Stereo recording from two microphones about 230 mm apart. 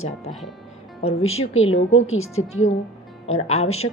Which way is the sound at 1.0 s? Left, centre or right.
Left.